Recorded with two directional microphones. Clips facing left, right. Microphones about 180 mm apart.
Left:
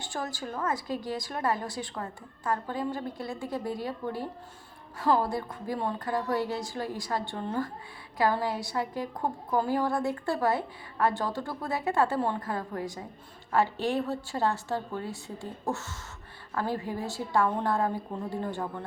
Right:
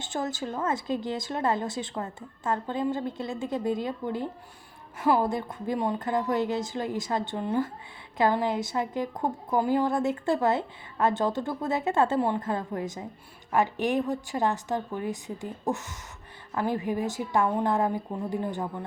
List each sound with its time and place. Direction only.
0.0 s a woman's voice: 20° right (ahead or behind)